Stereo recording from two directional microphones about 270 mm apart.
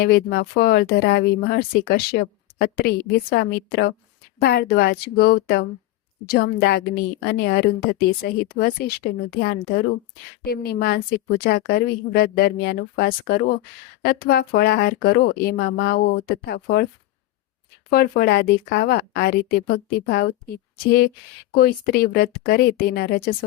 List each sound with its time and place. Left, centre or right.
0.0 s a woman's voice: left
10.4 s a woman's voice: left
17.9 s a woman's voice: left